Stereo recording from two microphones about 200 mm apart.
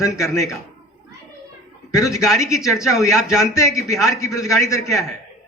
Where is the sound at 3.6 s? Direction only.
15° left (ahead or behind).